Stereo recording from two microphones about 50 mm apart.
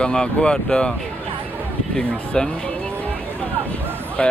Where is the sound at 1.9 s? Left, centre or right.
Centre.